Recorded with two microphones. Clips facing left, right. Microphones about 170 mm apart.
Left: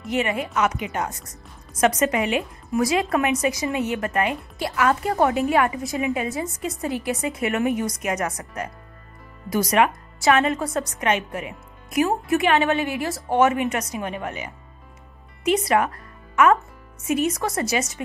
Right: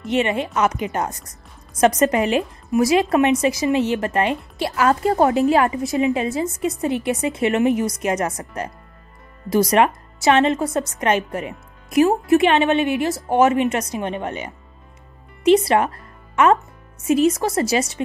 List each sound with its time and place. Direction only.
0.0 s a woman's voice: 25° right (ahead or behind)
0.7 s a woman's voice: 40° right (ahead or behind)
2.7 s a woman's voice: 25° right (ahead or behind)
11.1 s a woman's voice: 35° right (ahead or behind)